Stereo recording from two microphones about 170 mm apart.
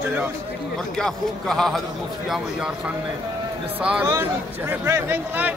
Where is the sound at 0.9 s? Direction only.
5° left (ahead or behind).